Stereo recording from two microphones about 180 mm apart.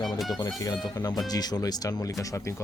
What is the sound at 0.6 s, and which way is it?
Speech, 20° left (ahead or behind).